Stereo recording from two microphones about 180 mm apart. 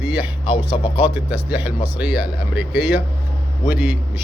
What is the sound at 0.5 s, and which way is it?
Speech, 30° left (ahead or behind).